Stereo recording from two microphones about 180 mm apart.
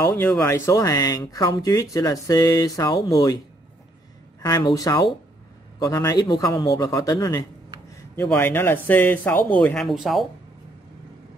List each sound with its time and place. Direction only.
0.0 s speech: 20° left (ahead or behind)
4.4 s speech: 25° left (ahead or behind); by 10.2 s centre (ahead or behind)